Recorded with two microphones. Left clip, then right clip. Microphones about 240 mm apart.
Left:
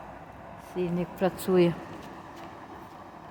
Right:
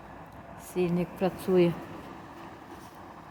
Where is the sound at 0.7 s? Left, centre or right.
Centre.